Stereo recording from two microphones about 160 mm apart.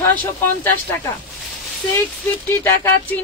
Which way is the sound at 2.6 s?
15° left (ahead or behind).